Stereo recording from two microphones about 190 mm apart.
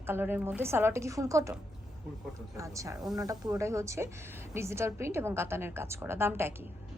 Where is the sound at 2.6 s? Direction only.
15° right (ahead or behind).